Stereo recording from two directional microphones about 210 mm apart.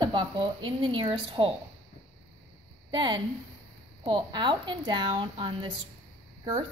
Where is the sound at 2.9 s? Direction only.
25° right (ahead or behind).